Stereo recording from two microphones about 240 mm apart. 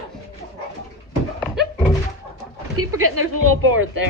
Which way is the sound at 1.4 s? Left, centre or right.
Centre.